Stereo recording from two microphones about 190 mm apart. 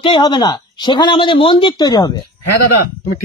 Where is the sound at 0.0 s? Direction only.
25° left (ahead or behind).